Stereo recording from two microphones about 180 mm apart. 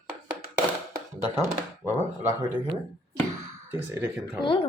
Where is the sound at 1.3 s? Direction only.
15° right (ahead or behind).